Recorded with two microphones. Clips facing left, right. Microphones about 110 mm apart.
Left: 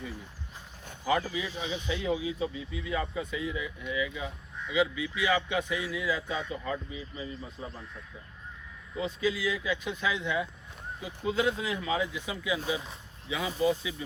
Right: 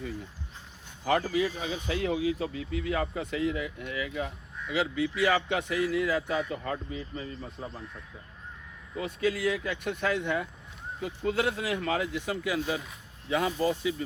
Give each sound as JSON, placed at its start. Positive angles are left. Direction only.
{"t": 1.0, "sound": "speech", "side_deg": -55}
{"t": 9.0, "sound": "speech", "side_deg": -60}